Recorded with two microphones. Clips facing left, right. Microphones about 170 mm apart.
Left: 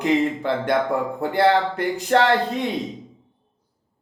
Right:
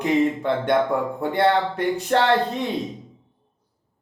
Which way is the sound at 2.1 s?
90° left.